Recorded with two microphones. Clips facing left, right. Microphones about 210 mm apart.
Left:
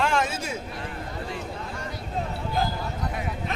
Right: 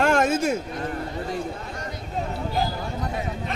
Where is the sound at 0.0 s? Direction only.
45° right (ahead or behind).